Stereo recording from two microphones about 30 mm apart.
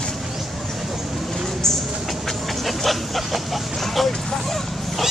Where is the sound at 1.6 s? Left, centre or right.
Centre.